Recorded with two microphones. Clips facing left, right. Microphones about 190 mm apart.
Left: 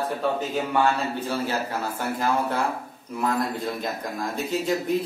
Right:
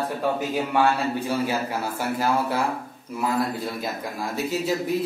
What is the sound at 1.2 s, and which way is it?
A man's voice, 10° right (ahead or behind).